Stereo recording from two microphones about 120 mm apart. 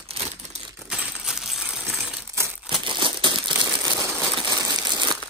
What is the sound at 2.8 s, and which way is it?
Crumpling, 45° right (ahead or behind).